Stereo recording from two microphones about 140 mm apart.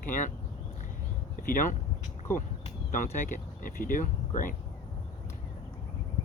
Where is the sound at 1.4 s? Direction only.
75° left (ahead or behind).